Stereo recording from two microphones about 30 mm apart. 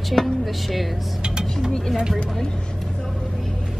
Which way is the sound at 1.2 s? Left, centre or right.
Right.